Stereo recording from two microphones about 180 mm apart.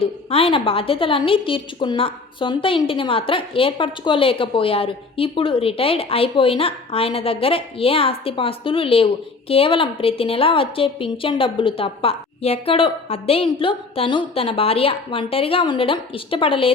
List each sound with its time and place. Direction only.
0.0 s a woman's voice: 30° left (ahead or behind)